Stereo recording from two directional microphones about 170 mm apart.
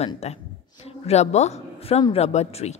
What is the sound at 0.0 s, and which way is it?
A woman's voice, 40° left (ahead or behind).